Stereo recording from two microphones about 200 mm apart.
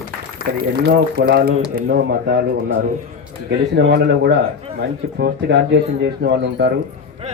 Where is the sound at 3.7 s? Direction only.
60° right (ahead or behind).